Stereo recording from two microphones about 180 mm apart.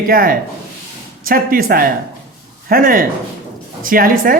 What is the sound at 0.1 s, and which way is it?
A woman's voice, 55° right (ahead or behind).